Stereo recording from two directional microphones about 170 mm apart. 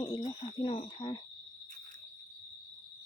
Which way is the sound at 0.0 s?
25° left (ahead or behind).